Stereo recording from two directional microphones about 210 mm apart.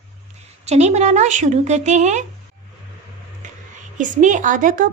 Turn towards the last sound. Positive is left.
turn(degrees=-40)  # may be behind; listen again after turning